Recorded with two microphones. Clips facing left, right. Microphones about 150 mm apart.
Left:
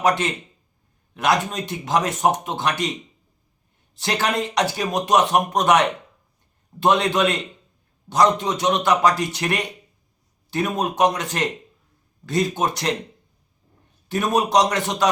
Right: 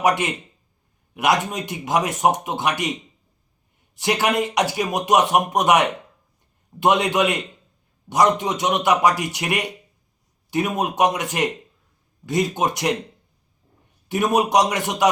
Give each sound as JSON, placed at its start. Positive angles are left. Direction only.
{"t": 0.0, "sound": "speech", "side_deg": -15}
{"t": 3.9, "sound": "speech", "side_deg": -15}
{"t": 14.1, "sound": "speech", "side_deg": -15}